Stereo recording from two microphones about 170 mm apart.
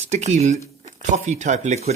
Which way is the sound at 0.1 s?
40° right (ahead or behind).